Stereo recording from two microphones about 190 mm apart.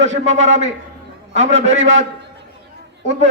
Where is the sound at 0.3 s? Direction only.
40° right (ahead or behind).